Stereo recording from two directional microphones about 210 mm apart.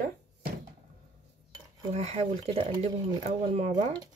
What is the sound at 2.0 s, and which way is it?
Speech, 30° right (ahead or behind).